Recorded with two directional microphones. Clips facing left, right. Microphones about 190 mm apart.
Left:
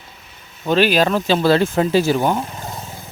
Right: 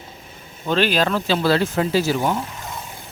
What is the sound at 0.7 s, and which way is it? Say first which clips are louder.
Speech: left 4 dB; 10° left (ahead or behind).